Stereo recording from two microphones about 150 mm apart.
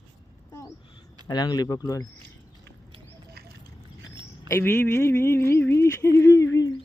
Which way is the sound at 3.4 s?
90° right.